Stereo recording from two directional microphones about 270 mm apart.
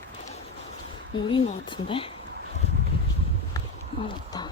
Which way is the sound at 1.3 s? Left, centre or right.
Centre.